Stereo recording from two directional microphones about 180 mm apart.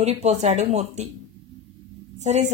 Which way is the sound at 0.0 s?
35° right (ahead or behind).